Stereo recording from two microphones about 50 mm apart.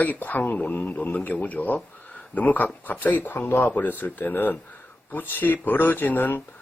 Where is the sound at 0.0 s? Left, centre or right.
Left.